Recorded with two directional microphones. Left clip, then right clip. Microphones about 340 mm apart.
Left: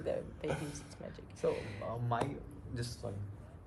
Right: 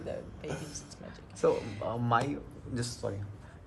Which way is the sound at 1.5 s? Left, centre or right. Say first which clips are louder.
Right 7 dB; left.